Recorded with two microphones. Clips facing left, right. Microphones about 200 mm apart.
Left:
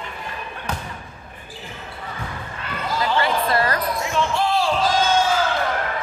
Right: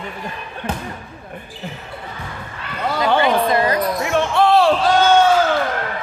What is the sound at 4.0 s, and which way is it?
Basketball bounce, 60° right (ahead or behind).